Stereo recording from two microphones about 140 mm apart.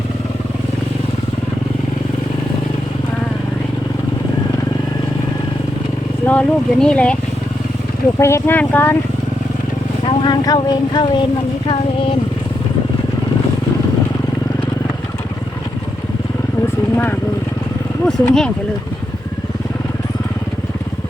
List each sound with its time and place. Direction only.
6.2 s speech: 10° left (ahead or behind)
8.2 s speech: 15° left (ahead or behind)
10.2 s speech: 30° left (ahead or behind)
16.9 s speech: 15° left (ahead or behind)